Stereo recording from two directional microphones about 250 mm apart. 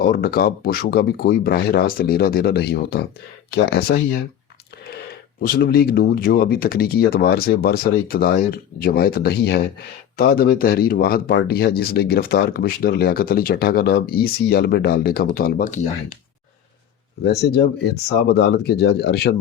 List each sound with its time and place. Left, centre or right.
0.0 s speech: left
17.2 s speech: left